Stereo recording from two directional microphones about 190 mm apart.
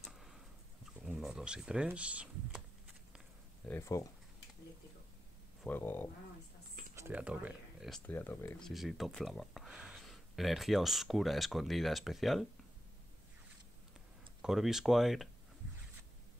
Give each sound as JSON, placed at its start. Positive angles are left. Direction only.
{"t": 0.0, "sound": "a sound", "side_deg": 0}
{"t": 1.0, "sound": "speech", "side_deg": -5}
{"t": 3.6, "sound": "speech", "side_deg": 15}
{"t": 5.6, "sound": "speech", "side_deg": 10}
{"t": 7.0, "sound": "speech", "side_deg": -10}
{"t": 8.1, "sound": "speech", "side_deg": 10}
{"t": 8.6, "sound": "speech", "side_deg": 0}
{"t": 14.4, "sound": "speech", "side_deg": 0}